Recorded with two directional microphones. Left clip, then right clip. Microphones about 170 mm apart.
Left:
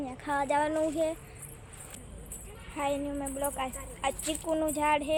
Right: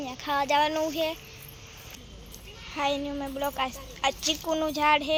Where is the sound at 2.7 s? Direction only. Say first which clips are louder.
Right 3 dB; 20° right (ahead or behind).